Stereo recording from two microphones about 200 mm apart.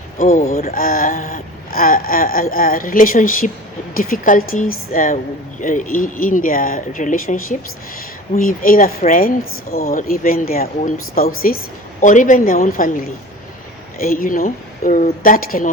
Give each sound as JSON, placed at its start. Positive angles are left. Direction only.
{"t": 0.2, "sound": "speech", "side_deg": 35}
{"t": 8.4, "sound": "speech", "side_deg": 45}
{"t": 14.0, "sound": "speech", "side_deg": 45}